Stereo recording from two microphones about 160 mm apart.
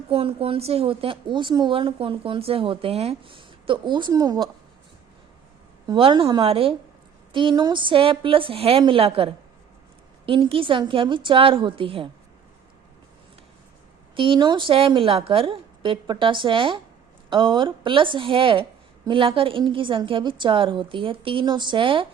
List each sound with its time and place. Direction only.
0.1 s speech: 35° right (ahead or behind)
5.8 s speech: 30° right (ahead or behind)
14.2 s speech: 30° right (ahead or behind)